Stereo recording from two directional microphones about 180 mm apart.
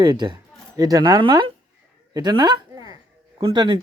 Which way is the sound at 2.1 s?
25° right (ahead or behind).